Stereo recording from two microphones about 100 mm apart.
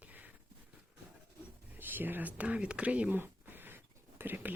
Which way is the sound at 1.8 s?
20° right (ahead or behind).